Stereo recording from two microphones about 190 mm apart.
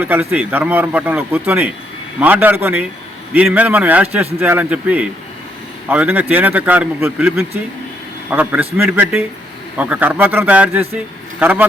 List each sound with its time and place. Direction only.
0.0 s a man's voice: 10° right (ahead or behind)